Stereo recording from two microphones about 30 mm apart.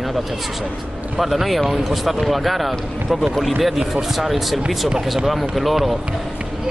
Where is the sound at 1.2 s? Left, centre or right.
Centre.